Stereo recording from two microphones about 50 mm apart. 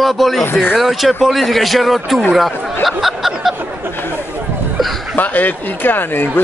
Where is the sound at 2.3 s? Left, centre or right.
Centre.